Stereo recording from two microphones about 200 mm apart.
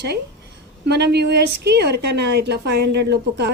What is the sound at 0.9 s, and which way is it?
A woman's voice, 55° right (ahead or behind).